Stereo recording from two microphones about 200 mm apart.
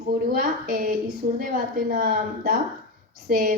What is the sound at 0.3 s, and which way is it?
A woman's voice, 45° right (ahead or behind).